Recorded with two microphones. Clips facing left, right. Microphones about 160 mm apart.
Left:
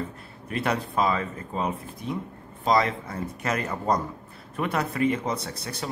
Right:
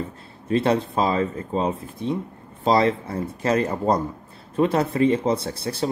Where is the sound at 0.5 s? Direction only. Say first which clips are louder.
Right 7 dB; 25° right (ahead or behind).